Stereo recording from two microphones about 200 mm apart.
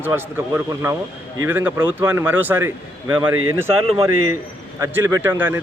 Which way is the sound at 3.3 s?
90° right.